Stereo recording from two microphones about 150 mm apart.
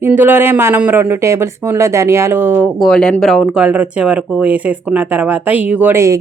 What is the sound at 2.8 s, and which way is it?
Speech, 5° left (ahead or behind).